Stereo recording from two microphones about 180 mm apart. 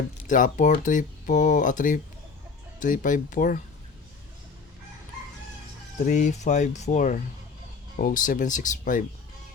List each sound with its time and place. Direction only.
0.3 s speech: 45° left (ahead or behind)
6.1 s speech: 40° left (ahead or behind)